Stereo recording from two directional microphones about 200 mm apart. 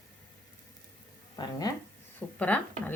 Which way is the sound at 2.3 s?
10° left (ahead or behind).